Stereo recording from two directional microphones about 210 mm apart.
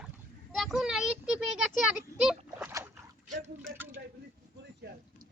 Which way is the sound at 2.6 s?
10° right (ahead or behind).